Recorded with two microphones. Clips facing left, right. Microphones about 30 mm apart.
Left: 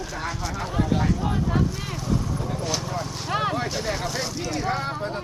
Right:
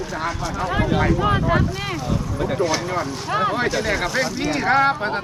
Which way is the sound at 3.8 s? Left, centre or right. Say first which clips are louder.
Right 6 dB; right.